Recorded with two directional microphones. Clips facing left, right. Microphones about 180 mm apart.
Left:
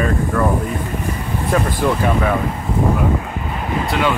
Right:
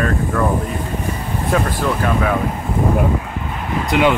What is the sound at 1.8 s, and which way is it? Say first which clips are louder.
Speech: left 2 dB; 15° left (ahead or behind).